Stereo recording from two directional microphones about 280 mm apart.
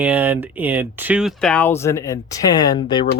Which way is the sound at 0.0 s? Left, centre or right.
Centre.